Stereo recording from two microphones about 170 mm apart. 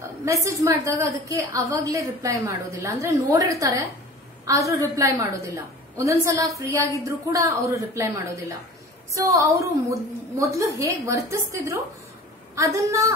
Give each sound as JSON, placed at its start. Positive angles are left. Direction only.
{"t": 0.0, "sound": "a woman's voice", "side_deg": -15}